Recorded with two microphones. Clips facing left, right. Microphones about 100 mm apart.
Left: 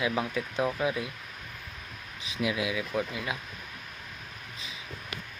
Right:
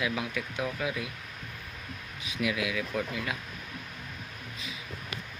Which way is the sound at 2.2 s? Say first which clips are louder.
Left 1 dB; 25° left (ahead or behind).